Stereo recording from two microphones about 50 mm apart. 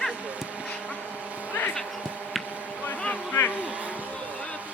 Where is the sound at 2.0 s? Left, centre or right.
Right.